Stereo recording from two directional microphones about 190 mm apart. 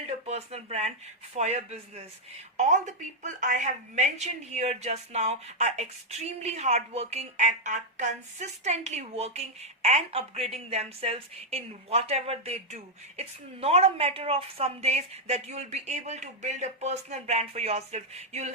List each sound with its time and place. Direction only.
0.3 s a woman's voice: 35° right (ahead or behind)